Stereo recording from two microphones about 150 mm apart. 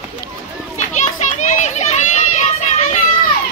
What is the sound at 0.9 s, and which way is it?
Children playing, 50° left (ahead or behind).